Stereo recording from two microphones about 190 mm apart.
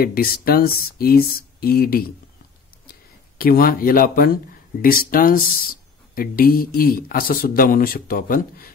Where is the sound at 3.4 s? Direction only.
50° left (ahead or behind).